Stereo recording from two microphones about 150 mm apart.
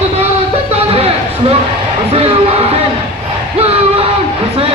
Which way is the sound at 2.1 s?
40° right (ahead or behind).